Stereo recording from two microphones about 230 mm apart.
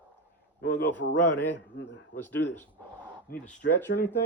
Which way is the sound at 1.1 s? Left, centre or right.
Left.